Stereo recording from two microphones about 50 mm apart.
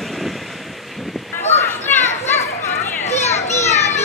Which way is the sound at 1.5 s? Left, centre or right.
Left.